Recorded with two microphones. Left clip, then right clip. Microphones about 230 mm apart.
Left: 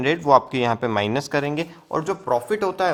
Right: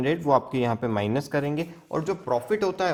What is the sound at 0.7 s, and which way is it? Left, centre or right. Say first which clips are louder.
Speech: left 5 dB; left.